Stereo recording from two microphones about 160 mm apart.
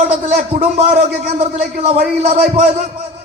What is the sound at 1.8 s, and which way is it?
Speech, 40° right (ahead or behind).